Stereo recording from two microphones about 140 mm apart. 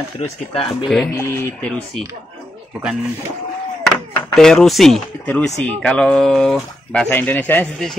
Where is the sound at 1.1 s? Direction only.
15° left (ahead or behind).